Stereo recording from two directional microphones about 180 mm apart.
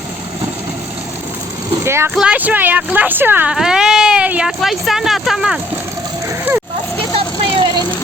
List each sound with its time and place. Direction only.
1.7 s speech: 15° right (ahead or behind)
7.1 s vehicle: 30° right (ahead or behind)